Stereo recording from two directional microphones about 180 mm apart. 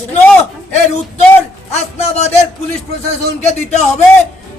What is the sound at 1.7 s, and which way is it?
A man's voice, 40° left (ahead or behind).